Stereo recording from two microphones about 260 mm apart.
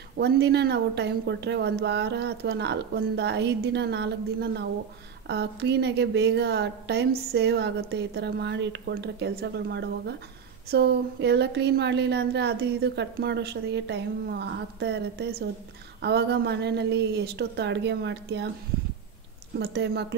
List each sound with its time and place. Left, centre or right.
0.2 s a woman's voice: right
19.6 s a woman's voice: right